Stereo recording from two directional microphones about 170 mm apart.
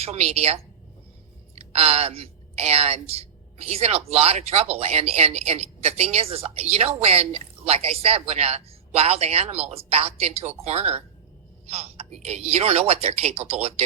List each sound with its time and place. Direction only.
0.0 s a woman's voice: 40° right (ahead or behind)